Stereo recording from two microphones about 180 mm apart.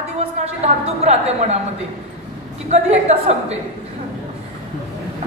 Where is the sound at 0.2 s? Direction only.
35° right (ahead or behind).